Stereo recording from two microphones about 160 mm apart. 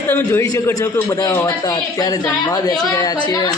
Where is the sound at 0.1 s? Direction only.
15° left (ahead or behind).